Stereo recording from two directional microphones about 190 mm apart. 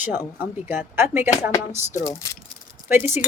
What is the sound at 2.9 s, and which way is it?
Speech, 10° right (ahead or behind).